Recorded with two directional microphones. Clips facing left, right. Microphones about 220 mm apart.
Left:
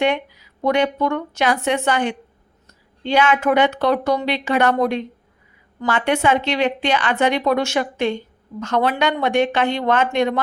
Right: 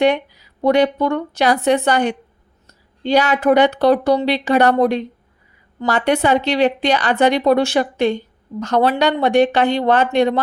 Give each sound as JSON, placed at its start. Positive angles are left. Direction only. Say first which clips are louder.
{"t": 0.0, "sound": "a woman's voice", "louder": "right 4 dB", "side_deg": -35}